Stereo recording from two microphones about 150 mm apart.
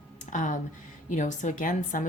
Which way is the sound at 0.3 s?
55° left (ahead or behind).